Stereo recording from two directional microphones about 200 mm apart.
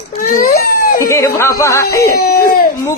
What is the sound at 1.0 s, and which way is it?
A man's voice, 15° left (ahead or behind).